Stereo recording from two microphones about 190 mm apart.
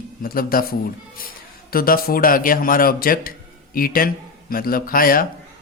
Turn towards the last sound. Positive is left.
turn(degrees=50)  # may be behind; listen again after turning